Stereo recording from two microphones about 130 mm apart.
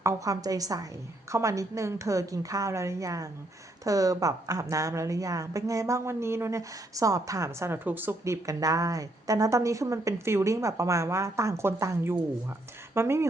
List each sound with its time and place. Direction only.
0.0 s a woman's voice: 30° right (ahead or behind)